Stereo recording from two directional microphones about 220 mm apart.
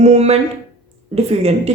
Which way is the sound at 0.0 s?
30° right (ahead or behind).